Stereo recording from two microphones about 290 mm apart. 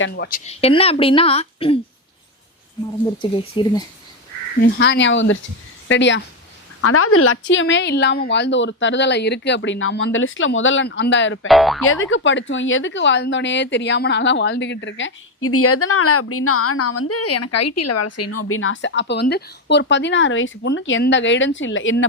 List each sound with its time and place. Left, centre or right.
0.0 s a woman's voice: left
3.2 s speech: centre
4.8 s speech: left
6.8 s speech: left
11.4 s speech: centre
11.8 s speech: left